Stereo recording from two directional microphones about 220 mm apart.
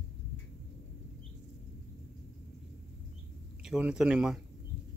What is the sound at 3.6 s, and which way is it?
Speech, 5° right (ahead or behind).